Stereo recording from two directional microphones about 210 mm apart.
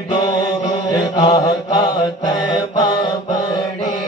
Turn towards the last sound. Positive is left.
turn(degrees=20)  # may be behind; listen again after turning